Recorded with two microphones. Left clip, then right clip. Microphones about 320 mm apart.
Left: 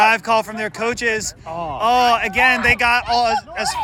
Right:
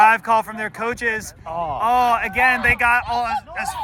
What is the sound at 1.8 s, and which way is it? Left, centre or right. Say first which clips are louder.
Speech: left 3 dB; centre.